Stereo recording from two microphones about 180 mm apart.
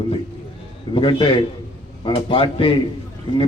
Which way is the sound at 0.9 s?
30° left (ahead or behind).